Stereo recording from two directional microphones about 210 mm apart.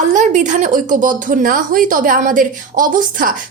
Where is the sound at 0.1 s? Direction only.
35° right (ahead or behind).